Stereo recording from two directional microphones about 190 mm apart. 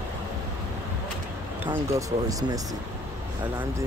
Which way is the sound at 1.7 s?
15° right (ahead or behind).